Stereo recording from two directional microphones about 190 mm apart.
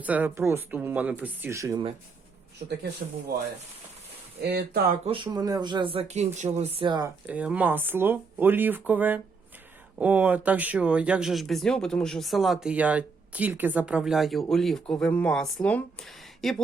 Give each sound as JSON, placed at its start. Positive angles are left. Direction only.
{"t": 0.0, "sound": "speech", "side_deg": -10}
{"t": 4.4, "sound": "speech", "side_deg": -60}
{"t": 5.0, "sound": "speech", "side_deg": -25}
{"t": 7.3, "sound": "speech", "side_deg": -5}